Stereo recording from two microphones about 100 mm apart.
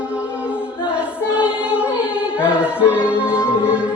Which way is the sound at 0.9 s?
15° right (ahead or behind).